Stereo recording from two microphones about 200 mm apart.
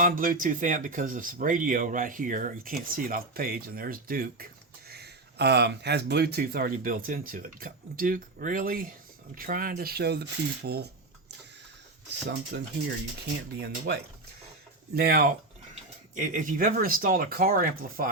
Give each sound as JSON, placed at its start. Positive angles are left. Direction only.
{"t": 0.0, "sound": "speech", "side_deg": -45}
{"t": 12.5, "sound": "speech", "side_deg": -50}